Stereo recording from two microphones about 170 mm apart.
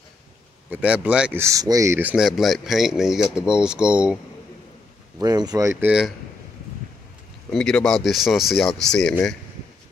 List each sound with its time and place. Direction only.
0.7 s speech: 5° right (ahead or behind)
5.2 s speech: 25° right (ahead or behind)
5.9 s speech: 5° right (ahead or behind)
7.5 s speech: 5° left (ahead or behind)